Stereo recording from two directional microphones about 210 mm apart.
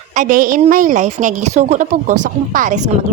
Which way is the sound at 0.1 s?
40° right (ahead or behind).